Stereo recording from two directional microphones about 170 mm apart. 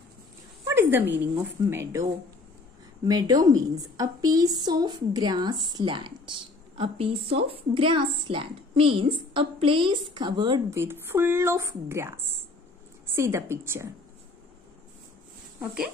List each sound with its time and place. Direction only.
0.7 s dog: 10° right (ahead or behind)
1.3 s a woman's voice: 15° right (ahead or behind)
3.1 s a woman's voice: 20° right (ahead or behind)
10.8 s a woman's voice: 15° right (ahead or behind)